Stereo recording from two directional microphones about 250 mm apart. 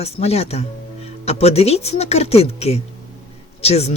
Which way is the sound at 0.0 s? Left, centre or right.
Left.